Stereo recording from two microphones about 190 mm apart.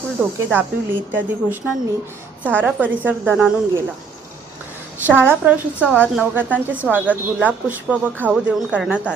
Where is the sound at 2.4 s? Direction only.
10° right (ahead or behind).